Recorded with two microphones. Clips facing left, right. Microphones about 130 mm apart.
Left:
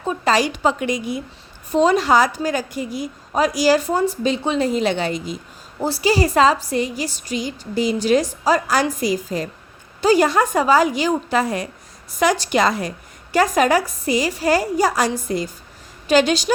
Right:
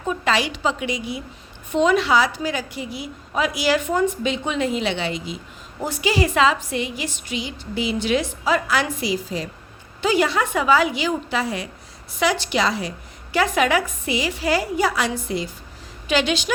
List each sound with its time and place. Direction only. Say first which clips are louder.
0.1 s a woman's voice: left 3 dB; 40° left (ahead or behind)